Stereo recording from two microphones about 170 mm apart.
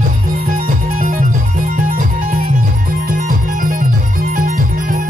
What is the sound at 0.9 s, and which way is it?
Music, 50° right (ahead or behind).